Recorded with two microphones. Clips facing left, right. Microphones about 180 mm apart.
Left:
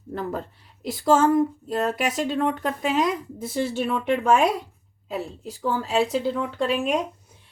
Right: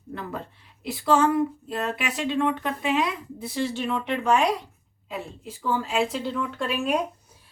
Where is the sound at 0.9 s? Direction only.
40° left (ahead or behind).